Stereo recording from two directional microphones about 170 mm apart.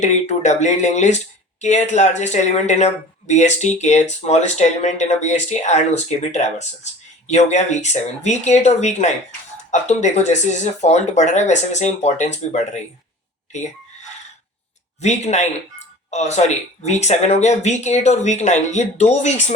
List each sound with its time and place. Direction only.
0.0 s speech: 45° left (ahead or behind)
15.0 s speech: 40° left (ahead or behind)